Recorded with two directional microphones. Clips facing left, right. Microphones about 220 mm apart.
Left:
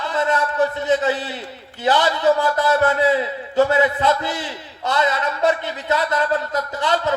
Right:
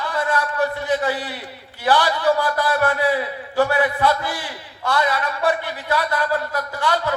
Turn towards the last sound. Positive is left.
turn(degrees=20)  # may be behind; listen again after turning